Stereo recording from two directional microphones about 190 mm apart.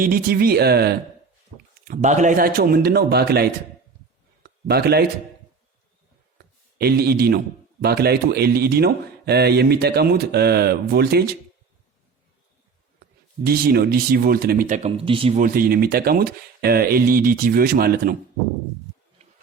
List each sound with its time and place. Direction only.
0.0 s a man's voice: 50° right (ahead or behind)
1.9 s speech: 40° right (ahead or behind); by 3.5 s 55° right (ahead or behind)
4.4 s a sound: 55° right (ahead or behind)
6.7 s a man's voice: 55° right (ahead or behind)
13.4 s speech: 50° right (ahead or behind)
14.8 s speech: 30° right (ahead or behind)
15.4 s speech: 45° right (ahead or behind)